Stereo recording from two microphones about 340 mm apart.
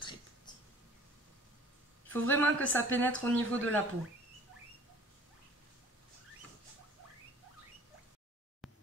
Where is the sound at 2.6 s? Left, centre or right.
Right.